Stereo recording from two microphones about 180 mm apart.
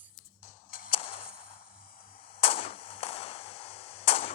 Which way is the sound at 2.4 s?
30° left (ahead or behind).